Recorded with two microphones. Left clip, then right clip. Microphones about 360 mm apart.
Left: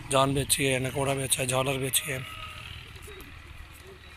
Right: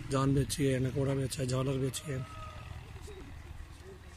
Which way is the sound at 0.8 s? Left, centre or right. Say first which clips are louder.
Left 5 dB; left.